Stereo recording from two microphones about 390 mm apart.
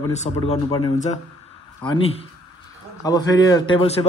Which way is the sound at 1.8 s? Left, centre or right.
Centre.